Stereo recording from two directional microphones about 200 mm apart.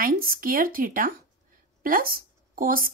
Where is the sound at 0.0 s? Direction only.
45° right (ahead or behind).